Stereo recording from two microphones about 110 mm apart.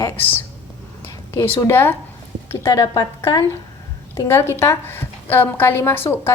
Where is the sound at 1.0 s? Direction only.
20° left (ahead or behind).